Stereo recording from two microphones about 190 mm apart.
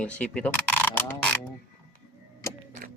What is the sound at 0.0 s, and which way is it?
Speech, 5° left (ahead or behind).